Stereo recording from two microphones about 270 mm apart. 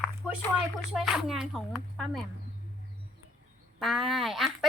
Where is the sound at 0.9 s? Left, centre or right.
Centre.